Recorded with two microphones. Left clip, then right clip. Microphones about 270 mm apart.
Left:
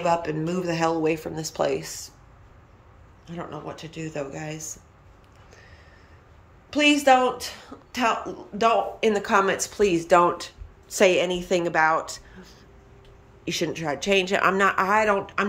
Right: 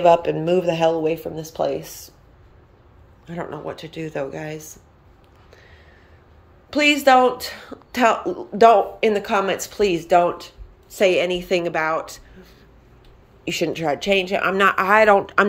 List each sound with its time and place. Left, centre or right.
0.0 s a woman's voice: centre
1.1 s speech: left
1.8 s a woman's voice: centre
3.3 s speech: centre
6.7 s speech: centre
9.0 s a woman's voice: centre
13.5 s a woman's voice: centre